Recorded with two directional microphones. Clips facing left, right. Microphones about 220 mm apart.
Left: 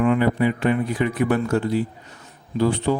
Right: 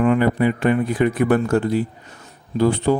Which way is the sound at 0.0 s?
45° right (ahead or behind).